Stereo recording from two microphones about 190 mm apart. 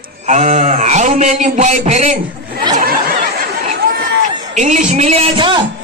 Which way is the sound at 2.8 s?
50° right (ahead or behind).